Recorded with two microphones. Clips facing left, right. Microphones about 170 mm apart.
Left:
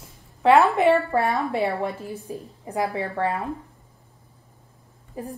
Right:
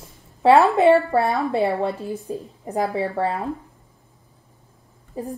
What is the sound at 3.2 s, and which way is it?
Speech, 35° right (ahead or behind).